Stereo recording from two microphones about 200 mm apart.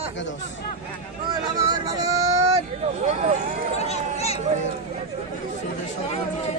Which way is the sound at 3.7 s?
30° left (ahead or behind).